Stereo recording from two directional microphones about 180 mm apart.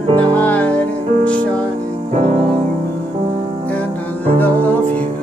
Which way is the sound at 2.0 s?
35° right (ahead or behind).